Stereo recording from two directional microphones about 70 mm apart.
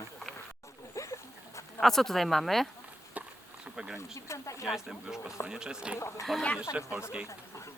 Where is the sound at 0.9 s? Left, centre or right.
Left.